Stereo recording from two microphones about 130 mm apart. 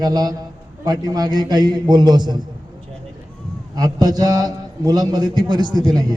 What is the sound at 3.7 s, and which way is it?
A man's voice, 30° right (ahead or behind).